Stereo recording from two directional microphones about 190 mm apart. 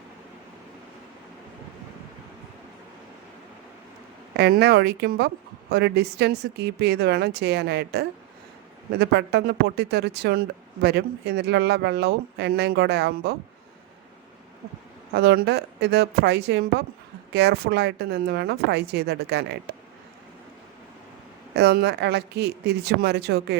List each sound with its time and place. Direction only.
4.4 s speech: 60° right (ahead or behind)
15.1 s speech: 60° right (ahead or behind)
21.5 s speech: 60° right (ahead or behind)